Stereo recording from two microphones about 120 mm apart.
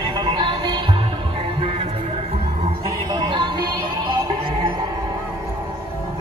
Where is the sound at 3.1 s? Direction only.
40° right (ahead or behind).